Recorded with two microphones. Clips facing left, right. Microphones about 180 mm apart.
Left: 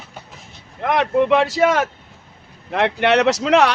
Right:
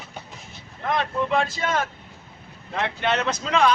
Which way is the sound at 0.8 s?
80° left.